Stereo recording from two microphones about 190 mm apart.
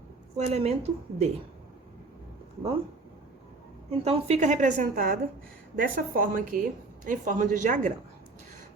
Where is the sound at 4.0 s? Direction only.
30° right (ahead or behind).